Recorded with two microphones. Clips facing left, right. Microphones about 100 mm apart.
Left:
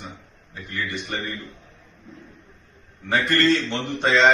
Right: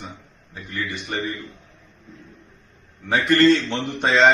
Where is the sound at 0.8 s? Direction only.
20° right (ahead or behind).